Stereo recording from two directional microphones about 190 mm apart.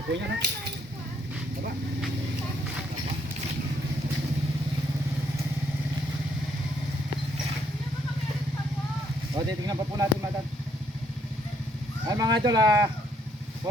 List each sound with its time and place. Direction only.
0.1 s speech: 65° right (ahead or behind)
9.3 s speech: 20° right (ahead or behind)
12.0 s speech: 20° right (ahead or behind)